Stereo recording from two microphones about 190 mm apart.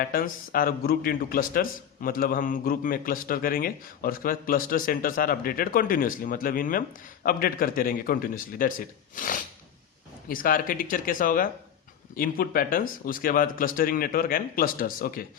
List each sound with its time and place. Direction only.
0.0 s a man's voice: 50° left (ahead or behind)